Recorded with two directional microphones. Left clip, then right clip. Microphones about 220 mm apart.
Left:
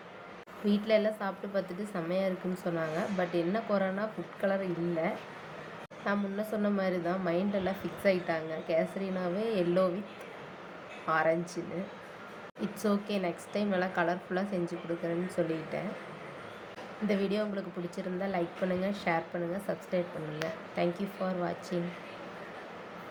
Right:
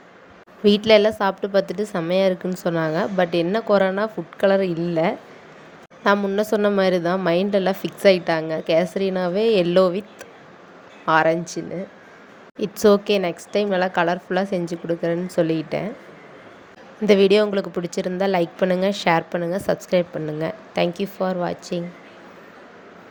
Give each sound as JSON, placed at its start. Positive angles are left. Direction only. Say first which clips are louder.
{"t": 0.6, "sound": "a woman's voice", "louder": "right 14 dB", "side_deg": -45}
{"t": 11.0, "sound": "a woman's voice", "louder": "right 11 dB", "side_deg": -45}
{"t": 17.1, "sound": "a woman's voice", "louder": "right 17 dB", "side_deg": -45}